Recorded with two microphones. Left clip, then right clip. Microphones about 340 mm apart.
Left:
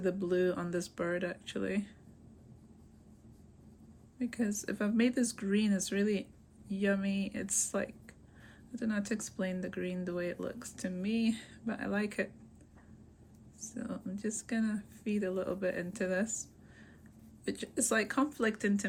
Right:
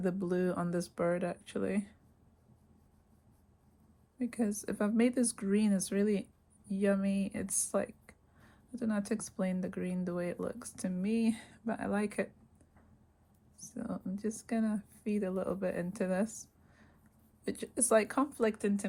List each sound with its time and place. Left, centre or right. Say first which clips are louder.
0.0 s speech: left 2 dB; centre
4.2 s speech: even; centre
13.7 s speech: right 1 dB; centre
17.4 s speech: left 1 dB; centre